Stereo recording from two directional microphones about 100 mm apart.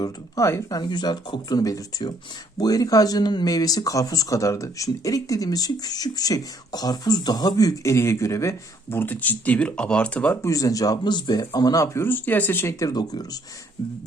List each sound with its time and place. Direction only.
0.0 s speech: 30° left (ahead or behind)
0.8 s speech: 45° left (ahead or behind); by 10.3 s 10° left (ahead or behind)
10.4 s speech: 35° left (ahead or behind)
12.0 s speech: 20° left (ahead or behind)
12.8 s speech: 40° left (ahead or behind)